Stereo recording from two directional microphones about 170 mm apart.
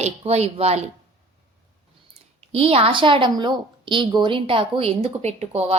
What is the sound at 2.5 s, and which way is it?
A woman's voice, 35° right (ahead or behind).